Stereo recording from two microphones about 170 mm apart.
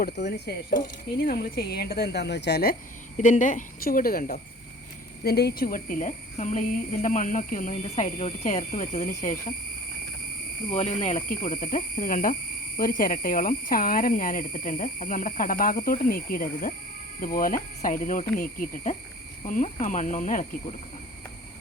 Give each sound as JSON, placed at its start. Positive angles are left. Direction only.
{"t": 0.0, "sound": "speech", "side_deg": 75}
{"t": 1.2, "sound": "speech", "side_deg": 65}
{"t": 3.2, "sound": "speech", "side_deg": 50}
{"t": 5.2, "sound": "speech", "side_deg": 70}
{"t": 10.7, "sound": "speech", "side_deg": 40}